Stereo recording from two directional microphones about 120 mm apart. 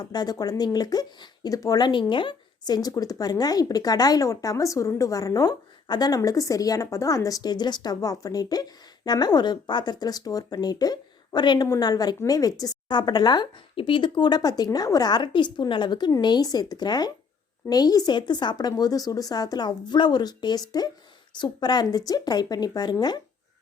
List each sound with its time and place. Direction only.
0.0 s speech: 35° left (ahead or behind)